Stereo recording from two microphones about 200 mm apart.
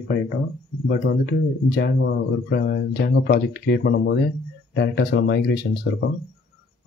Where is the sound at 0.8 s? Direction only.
55° left (ahead or behind).